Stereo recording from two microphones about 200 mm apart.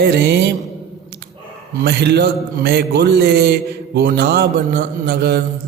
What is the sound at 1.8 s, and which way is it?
A man's voice, 55° right (ahead or behind).